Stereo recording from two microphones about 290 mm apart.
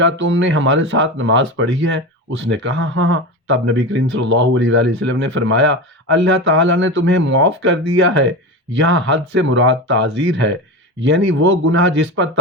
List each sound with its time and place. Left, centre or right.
0.0 s speech: right